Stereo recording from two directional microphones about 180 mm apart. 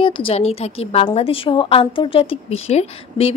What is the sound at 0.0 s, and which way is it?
A woman's voice, 30° left (ahead or behind).